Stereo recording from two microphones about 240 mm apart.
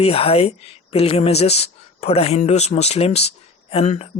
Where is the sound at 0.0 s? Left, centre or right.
Left.